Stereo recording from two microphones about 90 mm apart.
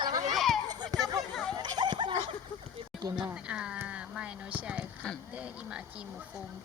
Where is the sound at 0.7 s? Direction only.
45° right (ahead or behind).